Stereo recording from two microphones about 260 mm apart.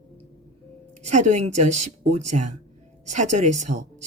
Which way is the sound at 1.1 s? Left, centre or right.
Right.